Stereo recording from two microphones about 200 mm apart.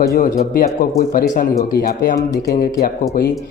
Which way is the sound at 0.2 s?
45° left (ahead or behind).